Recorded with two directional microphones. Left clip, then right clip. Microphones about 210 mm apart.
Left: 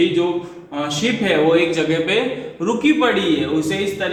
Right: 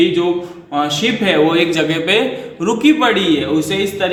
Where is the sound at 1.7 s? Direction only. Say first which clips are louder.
Right 3 dB; 50° right (ahead or behind).